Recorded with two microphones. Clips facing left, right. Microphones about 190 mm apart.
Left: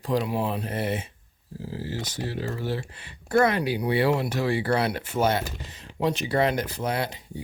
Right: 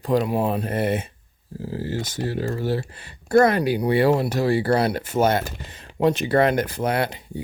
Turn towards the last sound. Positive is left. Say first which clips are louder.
# right 5 dB
turn(degrees=-60)  # may be behind; listen again after turning